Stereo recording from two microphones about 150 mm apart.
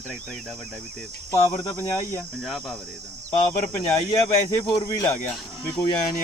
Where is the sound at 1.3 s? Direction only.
20° left (ahead or behind).